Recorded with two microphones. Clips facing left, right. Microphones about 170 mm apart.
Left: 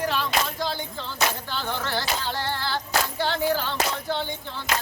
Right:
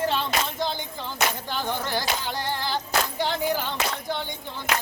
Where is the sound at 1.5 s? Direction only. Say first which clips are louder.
Right 1 dB; 15° right (ahead or behind).